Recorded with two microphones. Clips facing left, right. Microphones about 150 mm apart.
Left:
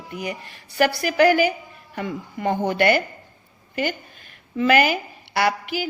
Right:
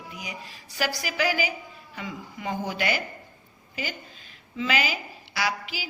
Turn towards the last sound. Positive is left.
turn(degrees=60)  # may be behind; listen again after turning